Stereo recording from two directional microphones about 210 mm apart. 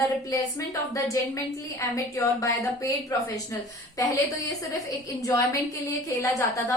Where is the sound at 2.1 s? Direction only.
15° left (ahead or behind).